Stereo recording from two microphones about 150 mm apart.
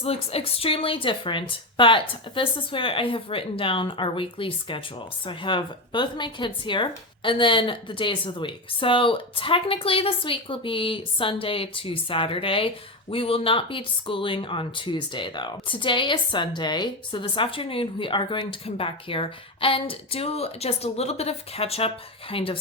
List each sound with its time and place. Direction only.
0.0 s speech: 40° left (ahead or behind)